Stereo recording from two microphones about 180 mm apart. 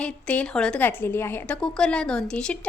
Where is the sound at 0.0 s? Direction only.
5° left (ahead or behind).